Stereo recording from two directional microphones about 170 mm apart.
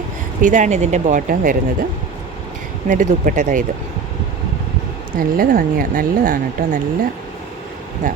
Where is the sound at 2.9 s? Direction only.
50° right (ahead or behind).